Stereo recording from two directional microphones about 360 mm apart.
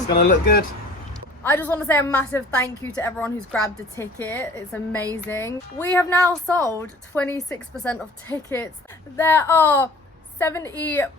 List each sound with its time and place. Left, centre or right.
0.2 s speech: left
1.5 s a woman's voice: centre